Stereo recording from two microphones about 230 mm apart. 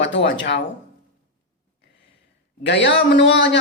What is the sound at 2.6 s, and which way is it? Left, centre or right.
Speech, left.